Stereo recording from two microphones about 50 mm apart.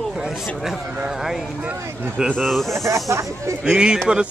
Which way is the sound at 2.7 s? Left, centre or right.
Right.